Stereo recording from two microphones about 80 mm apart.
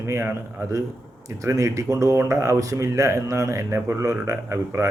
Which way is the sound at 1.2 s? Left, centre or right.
Right.